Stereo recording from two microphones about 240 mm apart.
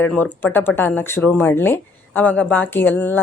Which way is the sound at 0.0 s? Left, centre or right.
Centre.